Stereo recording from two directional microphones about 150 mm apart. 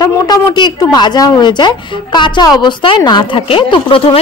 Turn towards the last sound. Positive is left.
turn(degrees=35)  # may be behind; listen again after turning